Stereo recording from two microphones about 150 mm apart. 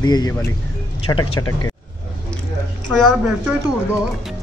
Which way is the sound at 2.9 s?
5° left (ahead or behind).